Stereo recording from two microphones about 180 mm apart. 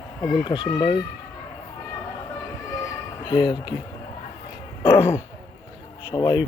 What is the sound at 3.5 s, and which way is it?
Speech, 25° left (ahead or behind).